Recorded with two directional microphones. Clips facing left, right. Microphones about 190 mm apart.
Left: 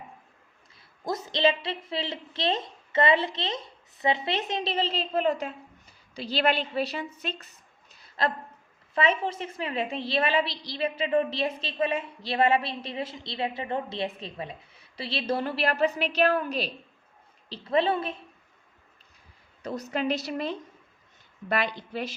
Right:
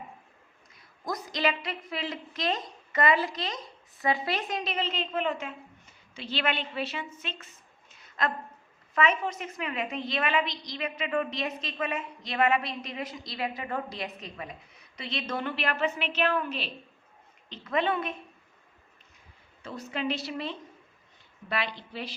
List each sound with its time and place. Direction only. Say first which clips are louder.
0.8 s a woman's voice: left 3 dB; 25° left (ahead or behind)
19.6 s a woman's voice: left 4 dB; 40° left (ahead or behind)